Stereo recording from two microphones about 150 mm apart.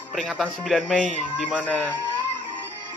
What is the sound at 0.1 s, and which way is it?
Speech, centre (ahead or behind).